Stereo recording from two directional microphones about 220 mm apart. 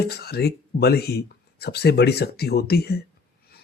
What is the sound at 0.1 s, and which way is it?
Speech, 45° left (ahead or behind).